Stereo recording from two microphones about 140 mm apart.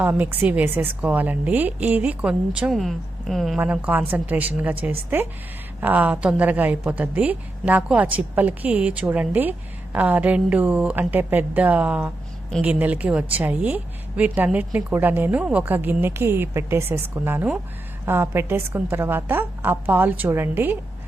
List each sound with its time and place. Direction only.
0.0 s a woman's voice: 15° right (ahead or behind)
3.6 s a woman's voice: 10° right (ahead or behind)